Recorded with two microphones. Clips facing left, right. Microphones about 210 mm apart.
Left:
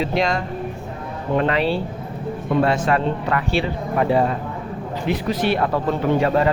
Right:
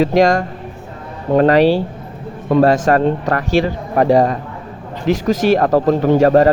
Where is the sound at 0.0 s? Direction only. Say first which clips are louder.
Right 8 dB; 45° right (ahead or behind).